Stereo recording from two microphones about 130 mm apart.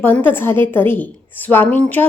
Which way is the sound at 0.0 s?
15° left (ahead or behind).